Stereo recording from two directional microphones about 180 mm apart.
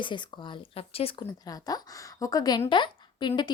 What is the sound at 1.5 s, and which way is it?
Speech, 20° left (ahead or behind).